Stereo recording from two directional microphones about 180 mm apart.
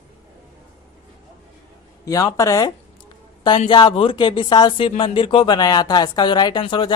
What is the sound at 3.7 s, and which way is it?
Speech, 25° left (ahead or behind).